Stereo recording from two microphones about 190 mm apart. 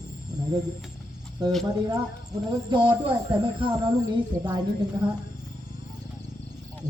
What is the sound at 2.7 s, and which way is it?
Speech, 25° right (ahead or behind).